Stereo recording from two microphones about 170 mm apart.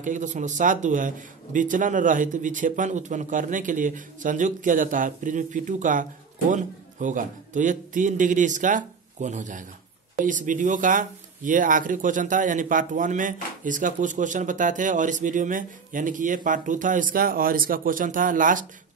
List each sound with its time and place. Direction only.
0.0 s speech: 50° right (ahead or behind)